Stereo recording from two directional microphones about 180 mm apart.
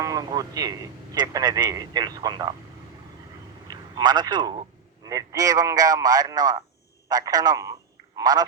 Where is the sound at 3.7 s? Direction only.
20° right (ahead or behind).